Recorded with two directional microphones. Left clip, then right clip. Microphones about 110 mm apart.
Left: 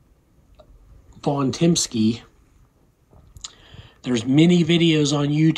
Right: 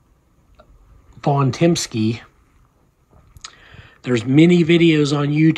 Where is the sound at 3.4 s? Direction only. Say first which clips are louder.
Right 1 dB; 5° left (ahead or behind).